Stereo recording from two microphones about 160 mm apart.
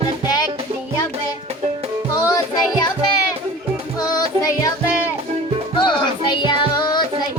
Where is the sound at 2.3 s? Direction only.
25° left (ahead or behind).